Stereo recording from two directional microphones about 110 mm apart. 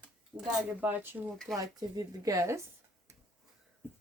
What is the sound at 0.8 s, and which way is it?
Speech, 20° right (ahead or behind).